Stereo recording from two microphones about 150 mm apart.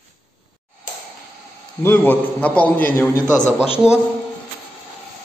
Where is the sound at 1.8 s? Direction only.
15° left (ahead or behind).